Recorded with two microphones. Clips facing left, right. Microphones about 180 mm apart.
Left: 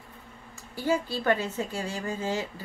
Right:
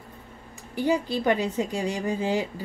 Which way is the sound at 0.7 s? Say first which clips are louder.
Right 3 dB; 15° right (ahead or behind).